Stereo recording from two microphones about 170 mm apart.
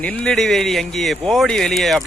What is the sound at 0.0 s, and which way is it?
Speech, 10° left (ahead or behind).